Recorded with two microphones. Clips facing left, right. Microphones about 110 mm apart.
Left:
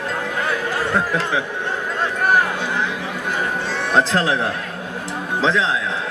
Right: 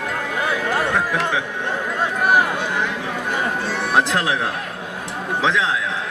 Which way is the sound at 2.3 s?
15° right (ahead or behind).